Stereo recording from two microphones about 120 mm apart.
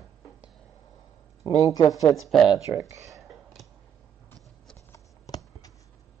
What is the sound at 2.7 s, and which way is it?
Speech, 25° right (ahead or behind).